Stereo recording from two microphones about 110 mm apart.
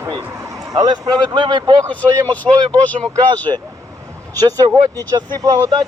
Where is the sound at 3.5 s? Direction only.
55° right (ahead or behind).